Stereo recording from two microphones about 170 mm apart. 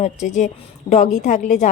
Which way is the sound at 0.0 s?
45° left (ahead or behind).